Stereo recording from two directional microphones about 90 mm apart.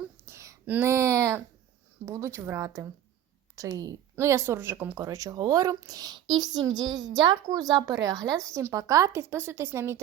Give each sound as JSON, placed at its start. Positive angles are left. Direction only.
{"t": 0.3, "sound": "a sound", "side_deg": -30}
{"t": 0.7, "sound": "a woman's voice", "side_deg": -25}
{"t": 4.1, "sound": "speech", "side_deg": -30}
{"t": 5.0, "sound": "a woman's voice", "side_deg": -40}